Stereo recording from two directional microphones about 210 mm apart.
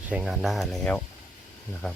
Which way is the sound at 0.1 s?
5° right (ahead or behind).